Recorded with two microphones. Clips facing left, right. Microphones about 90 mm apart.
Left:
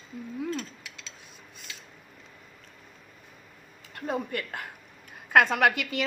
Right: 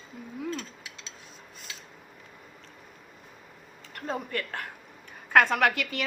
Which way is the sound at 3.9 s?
20° left (ahead or behind).